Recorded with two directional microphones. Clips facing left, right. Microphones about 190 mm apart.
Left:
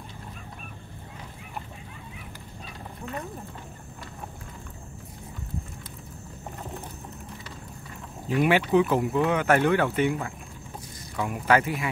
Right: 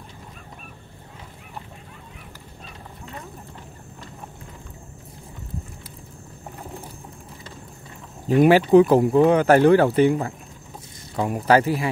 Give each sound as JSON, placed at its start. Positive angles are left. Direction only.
{"t": 8.3, "sound": "speech", "side_deg": -40}